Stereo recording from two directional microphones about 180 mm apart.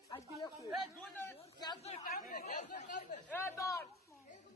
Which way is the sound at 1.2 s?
20° left (ahead or behind).